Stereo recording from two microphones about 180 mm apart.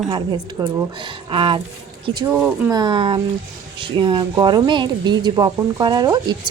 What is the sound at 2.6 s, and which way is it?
A woman's voice, 20° right (ahead or behind).